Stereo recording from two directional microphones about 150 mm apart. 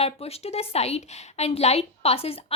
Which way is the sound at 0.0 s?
45° left (ahead or behind).